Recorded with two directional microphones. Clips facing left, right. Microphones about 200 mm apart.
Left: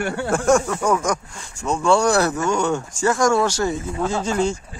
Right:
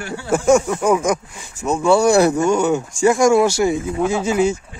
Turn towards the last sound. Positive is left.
turn(degrees=-5)  # may be behind; listen again after turning